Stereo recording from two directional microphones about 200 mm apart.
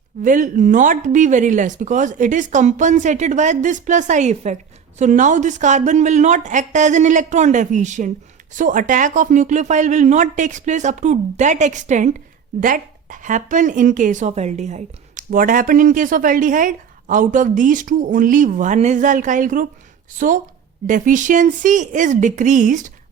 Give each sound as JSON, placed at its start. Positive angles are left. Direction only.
{"t": 0.2, "sound": "a woman's voice", "side_deg": -40}